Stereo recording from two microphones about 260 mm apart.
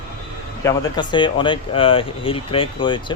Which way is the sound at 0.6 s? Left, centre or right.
Centre.